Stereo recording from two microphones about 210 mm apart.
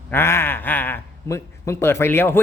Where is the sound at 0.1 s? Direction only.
10° left (ahead or behind).